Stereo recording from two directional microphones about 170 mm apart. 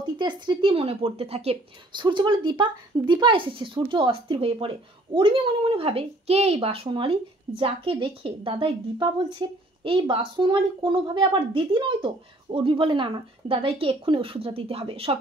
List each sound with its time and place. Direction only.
0.2 s a woman's voice: 25° right (ahead or behind)